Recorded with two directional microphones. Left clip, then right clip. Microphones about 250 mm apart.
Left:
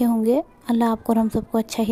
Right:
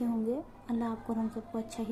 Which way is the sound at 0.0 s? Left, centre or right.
Left.